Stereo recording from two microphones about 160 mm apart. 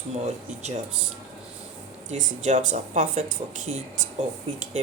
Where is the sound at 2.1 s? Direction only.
50° right (ahead or behind).